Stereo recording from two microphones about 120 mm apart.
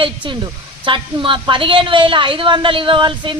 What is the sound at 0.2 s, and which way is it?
A woman's voice, 40° right (ahead or behind).